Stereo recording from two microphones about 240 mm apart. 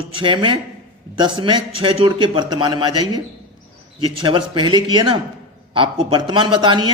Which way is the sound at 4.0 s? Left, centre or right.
Right.